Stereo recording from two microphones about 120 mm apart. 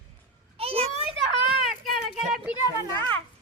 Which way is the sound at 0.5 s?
55° right (ahead or behind).